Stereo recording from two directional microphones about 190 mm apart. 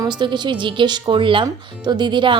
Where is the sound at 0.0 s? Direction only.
25° right (ahead or behind).